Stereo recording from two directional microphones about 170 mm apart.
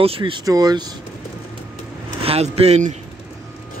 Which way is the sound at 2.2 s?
35° right (ahead or behind).